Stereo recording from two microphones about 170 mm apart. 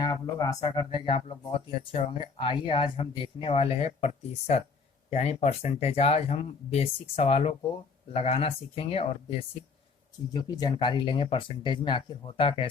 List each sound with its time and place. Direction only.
0.0 s speech: 20° left (ahead or behind)
10.3 s speech: 25° left (ahead or behind)